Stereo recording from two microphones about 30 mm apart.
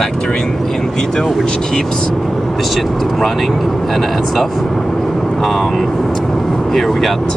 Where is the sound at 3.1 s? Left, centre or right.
Centre.